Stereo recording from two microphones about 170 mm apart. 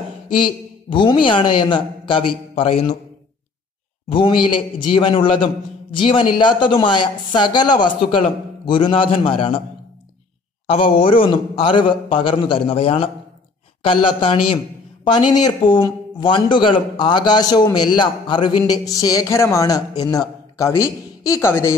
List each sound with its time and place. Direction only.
0.4 s speech: 30° left (ahead or behind)
4.1 s speech: 30° left (ahead or behind)
10.7 s a man's voice: 30° left (ahead or behind); by 21.7 s 15° left (ahead or behind)